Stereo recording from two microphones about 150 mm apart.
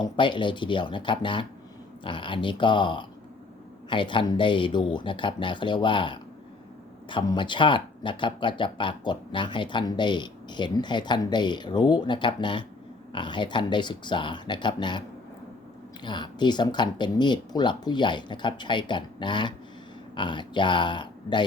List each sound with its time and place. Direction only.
0.0 s speech: 30° left (ahead or behind)
16.0 s speech: 30° left (ahead or behind)